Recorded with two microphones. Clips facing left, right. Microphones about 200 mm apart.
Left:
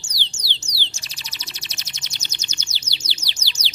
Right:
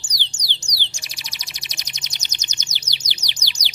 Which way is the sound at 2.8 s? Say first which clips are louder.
Left 1 dB; 15° right (ahead or behind).